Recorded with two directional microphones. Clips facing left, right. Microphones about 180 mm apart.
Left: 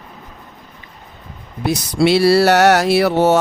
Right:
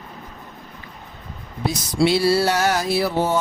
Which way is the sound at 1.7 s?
70° left (ahead or behind).